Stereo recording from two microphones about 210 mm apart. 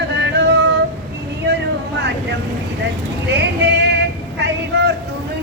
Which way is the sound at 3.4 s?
55° right (ahead or behind).